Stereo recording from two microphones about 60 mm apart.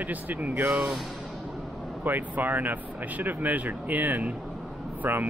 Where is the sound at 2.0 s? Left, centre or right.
Right.